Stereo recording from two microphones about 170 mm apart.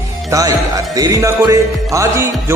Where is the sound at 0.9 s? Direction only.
20° right (ahead or behind).